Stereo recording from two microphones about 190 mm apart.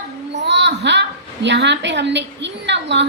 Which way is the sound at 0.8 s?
65° right (ahead or behind).